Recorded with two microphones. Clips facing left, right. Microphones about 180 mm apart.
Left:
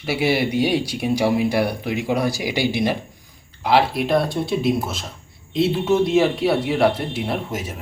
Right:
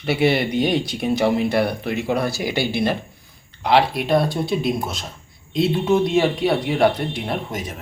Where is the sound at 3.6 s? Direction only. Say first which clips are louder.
Even; centre (ahead or behind).